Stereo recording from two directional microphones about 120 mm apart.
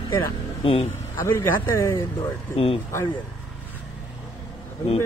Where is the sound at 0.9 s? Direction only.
20° left (ahead or behind).